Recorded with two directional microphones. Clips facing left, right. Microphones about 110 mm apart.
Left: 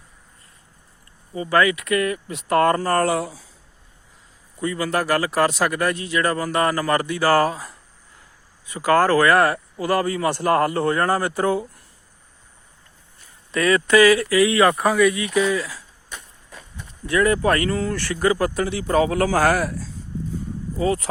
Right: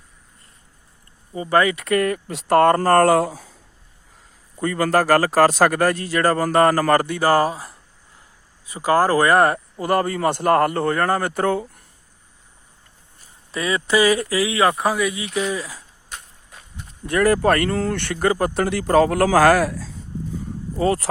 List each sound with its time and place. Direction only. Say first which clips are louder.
1.4 s speech: right 1 dB; 30° right (ahead or behind)
2.7 s speech: right 5 dB; 45° right (ahead or behind)
4.6 s speech: right 4 dB; 45° right (ahead or behind); by 7.7 s 15° right (ahead or behind)
8.8 s speech: even; 20° right (ahead or behind)
9.2 s speech: right 1 dB; 35° right (ahead or behind)
9.8 s speech: right 1 dB; 45° right (ahead or behind)
13.5 s speech: left 4 dB; 25° right (ahead or behind)
17.7 s speech: right 1 dB; 65° right (ahead or behind); by 19.6 s 90° right
20.7 s speech: right 2 dB; 55° right (ahead or behind)